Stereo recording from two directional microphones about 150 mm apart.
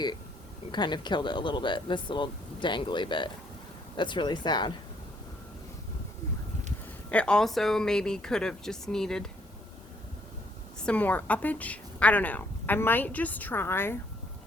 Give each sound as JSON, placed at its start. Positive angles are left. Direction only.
{"t": 0.7, "sound": "speech", "side_deg": 30}
{"t": 7.1, "sound": "speech", "side_deg": 5}
{"t": 10.8, "sound": "a woman's voice", "side_deg": 10}